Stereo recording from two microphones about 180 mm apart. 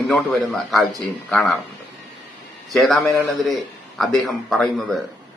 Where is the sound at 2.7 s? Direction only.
Centre (ahead or behind).